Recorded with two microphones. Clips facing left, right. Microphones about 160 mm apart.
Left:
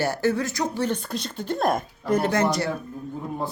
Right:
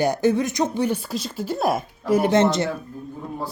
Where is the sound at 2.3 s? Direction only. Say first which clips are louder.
Right 4 dB; 25° right (ahead or behind).